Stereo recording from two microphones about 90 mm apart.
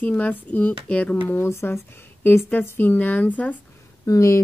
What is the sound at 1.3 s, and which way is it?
Speech, 30° left (ahead or behind).